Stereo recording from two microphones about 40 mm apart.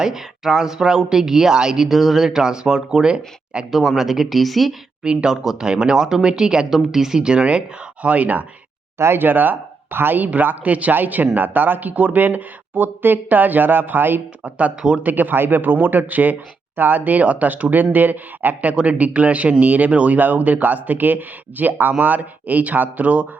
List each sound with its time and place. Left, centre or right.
0.0 s speech: centre
1.9 s speech: centre; by 3.7 s right
3.7 s speech: centre
5.0 s speech: centre
6.7 s speech: centre; by 7.6 s right
8.0 s speech: right
9.0 s speech: right
10.3 s speech: right
10.9 s speech: right
14.8 s speech: right
15.0 s speech: right